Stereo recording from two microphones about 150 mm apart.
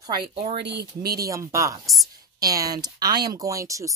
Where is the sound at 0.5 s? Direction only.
90° right.